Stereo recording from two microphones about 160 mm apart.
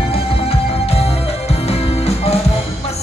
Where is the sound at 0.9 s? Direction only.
40° left (ahead or behind).